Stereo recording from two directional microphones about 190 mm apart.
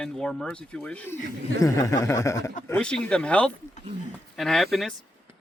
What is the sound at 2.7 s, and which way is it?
Speech, 5° left (ahead or behind).